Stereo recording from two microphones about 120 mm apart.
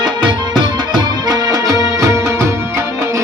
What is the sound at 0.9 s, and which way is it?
Music, 30° right (ahead or behind).